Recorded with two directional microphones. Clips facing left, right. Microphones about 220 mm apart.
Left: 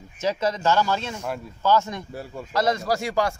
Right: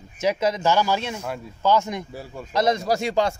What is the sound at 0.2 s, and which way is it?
A man's voice, 15° right (ahead or behind).